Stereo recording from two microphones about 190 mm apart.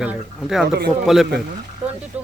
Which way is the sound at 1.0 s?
Centre (ahead or behind).